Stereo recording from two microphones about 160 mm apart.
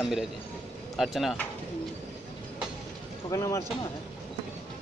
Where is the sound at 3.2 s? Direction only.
20° left (ahead or behind).